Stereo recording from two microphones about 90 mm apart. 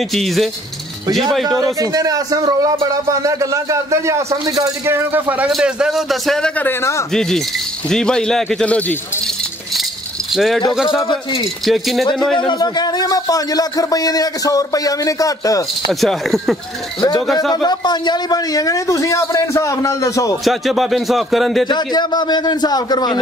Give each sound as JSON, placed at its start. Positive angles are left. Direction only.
{"t": 0.1, "sound": "speech", "side_deg": 0}
{"t": 1.8, "sound": "a man's voice", "side_deg": -40}
{"t": 4.8, "sound": "speech", "side_deg": -30}
{"t": 5.6, "sound": "speech", "side_deg": -10}
{"t": 6.6, "sound": "a man's voice", "side_deg": 30}
{"t": 7.1, "sound": "a man's voice", "side_deg": 5}
{"t": 10.3, "sound": "speech", "side_deg": 0}
{"t": 11.1, "sound": "speech", "side_deg": 90}
{"t": 11.6, "sound": "a man's voice", "side_deg": 0}
{"t": 12.4, "sound": "speech", "side_deg": 50}
{"t": 15.9, "sound": "speech", "side_deg": 0}
{"t": 17.6, "sound": "a man's voice", "side_deg": 50}
{"t": 20.4, "sound": "speech", "side_deg": 0}
{"t": 21.6, "sound": "speech", "side_deg": 55}